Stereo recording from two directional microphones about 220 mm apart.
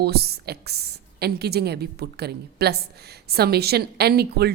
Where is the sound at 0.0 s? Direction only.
45° right (ahead or behind).